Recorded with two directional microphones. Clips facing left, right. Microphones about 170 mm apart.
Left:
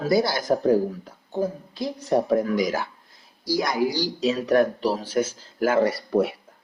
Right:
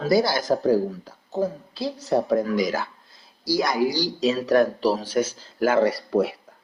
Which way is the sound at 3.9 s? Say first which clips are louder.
Right 1 dB; 35° right (ahead or behind).